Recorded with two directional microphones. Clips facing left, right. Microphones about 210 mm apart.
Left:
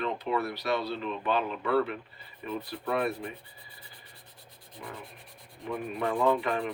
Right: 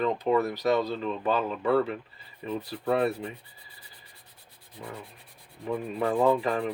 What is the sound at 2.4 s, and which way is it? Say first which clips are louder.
Speech: right 4 dB; 30° right (ahead or behind).